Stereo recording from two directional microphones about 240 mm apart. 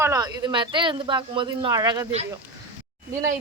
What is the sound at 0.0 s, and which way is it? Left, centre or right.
Speech, centre.